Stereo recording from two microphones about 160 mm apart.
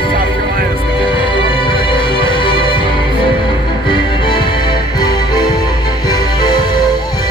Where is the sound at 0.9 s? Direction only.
30° left (ahead or behind).